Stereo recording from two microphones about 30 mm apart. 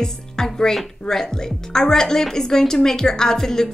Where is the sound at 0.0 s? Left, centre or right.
Left.